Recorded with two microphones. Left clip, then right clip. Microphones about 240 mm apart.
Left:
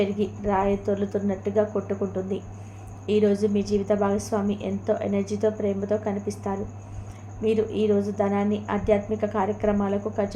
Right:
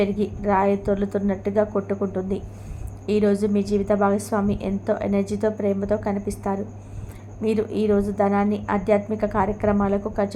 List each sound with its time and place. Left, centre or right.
0.0 s a woman's voice: right